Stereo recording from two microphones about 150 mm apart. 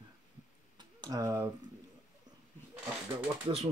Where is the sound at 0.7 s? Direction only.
25° right (ahead or behind).